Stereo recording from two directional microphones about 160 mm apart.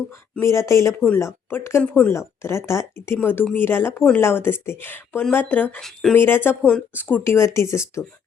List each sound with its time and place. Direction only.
0.3 s speech: 15° left (ahead or behind)
6.1 s speech: 15° left (ahead or behind)